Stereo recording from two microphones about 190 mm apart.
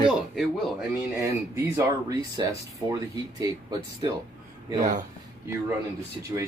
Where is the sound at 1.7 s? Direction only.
20° right (ahead or behind).